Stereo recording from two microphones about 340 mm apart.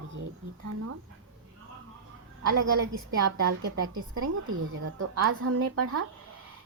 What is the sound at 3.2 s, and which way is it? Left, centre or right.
A woman's voice, right.